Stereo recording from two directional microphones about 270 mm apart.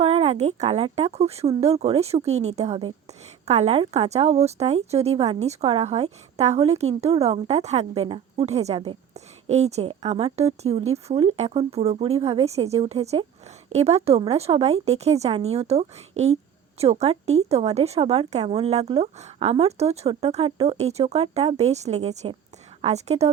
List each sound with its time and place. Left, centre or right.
0.0 s a woman's voice: right